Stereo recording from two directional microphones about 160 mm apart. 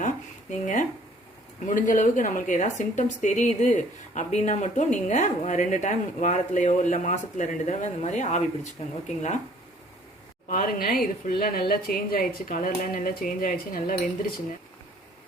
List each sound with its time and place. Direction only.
0.6 s a woman's voice: 50° left (ahead or behind)
10.5 s a woman's voice: 60° left (ahead or behind)